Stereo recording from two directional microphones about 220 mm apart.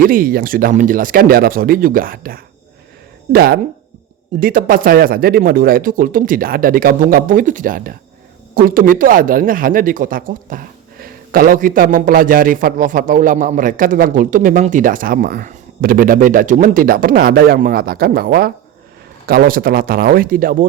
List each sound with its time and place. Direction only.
0.0 s speech: 40° right (ahead or behind)